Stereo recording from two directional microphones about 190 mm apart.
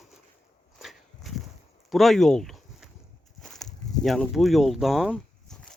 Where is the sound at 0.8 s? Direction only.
Centre (ahead or behind).